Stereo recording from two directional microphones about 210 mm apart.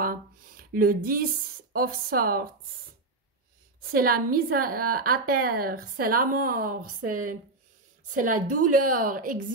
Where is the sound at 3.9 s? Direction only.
45° right (ahead or behind).